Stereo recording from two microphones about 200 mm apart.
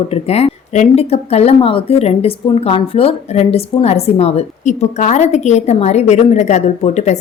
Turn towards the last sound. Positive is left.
turn(degrees=35)  # may be behind; listen again after turning